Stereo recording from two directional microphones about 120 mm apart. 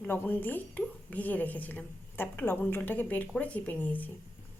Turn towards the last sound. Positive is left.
turn(degrees=15)  # may be behind; listen again after turning